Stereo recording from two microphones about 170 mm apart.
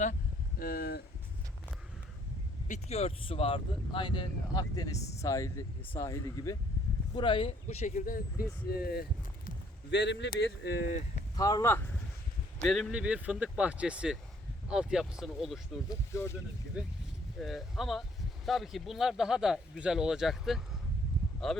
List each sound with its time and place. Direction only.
0.6 s speech: 60° left (ahead or behind)
2.6 s speech: 40° left (ahead or behind); by 6.6 s 20° left (ahead or behind)
7.1 s speech: 30° left (ahead or behind); by 8.4 s 55° left (ahead or behind)
8.7 s speech: 65° left (ahead or behind)
9.9 s speech: 90° left; by 10.9 s 70° left (ahead or behind)
11.3 s speech: 20° left (ahead or behind)
12.6 s speech: centre (ahead or behind)
15.9 s speech: 15° left (ahead or behind)
17.4 s speech: centre (ahead or behind)